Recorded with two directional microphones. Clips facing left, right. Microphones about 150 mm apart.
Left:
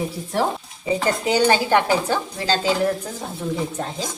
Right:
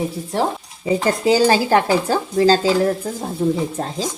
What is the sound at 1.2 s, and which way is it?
Speech, 35° right (ahead or behind).